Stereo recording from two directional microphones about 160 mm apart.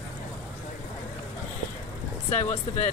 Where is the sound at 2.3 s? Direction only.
45° left (ahead or behind).